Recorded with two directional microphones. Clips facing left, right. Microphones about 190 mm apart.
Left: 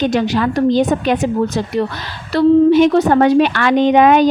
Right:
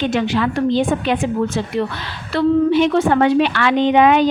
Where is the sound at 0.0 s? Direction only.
40° left (ahead or behind).